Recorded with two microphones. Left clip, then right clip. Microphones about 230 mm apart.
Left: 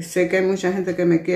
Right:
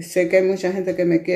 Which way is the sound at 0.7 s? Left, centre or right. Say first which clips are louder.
Even; centre.